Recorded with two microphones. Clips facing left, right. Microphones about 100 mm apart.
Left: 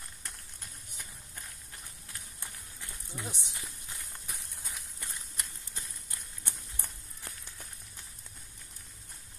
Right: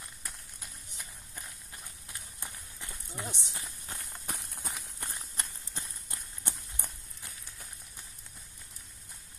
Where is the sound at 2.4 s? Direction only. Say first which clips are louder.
Right 3 dB; 20° right (ahead or behind).